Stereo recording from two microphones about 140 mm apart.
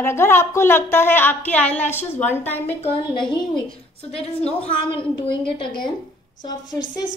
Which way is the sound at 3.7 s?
45° left (ahead or behind).